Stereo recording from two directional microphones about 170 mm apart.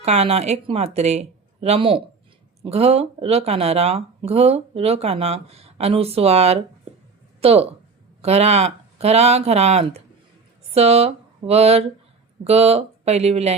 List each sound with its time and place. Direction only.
0.0 s speech: 40° right (ahead or behind)